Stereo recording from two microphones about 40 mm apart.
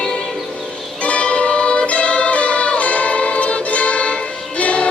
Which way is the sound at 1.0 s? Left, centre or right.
Left.